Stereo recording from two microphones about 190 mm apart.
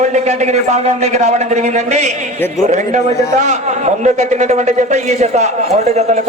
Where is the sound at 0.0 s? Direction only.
40° right (ahead or behind).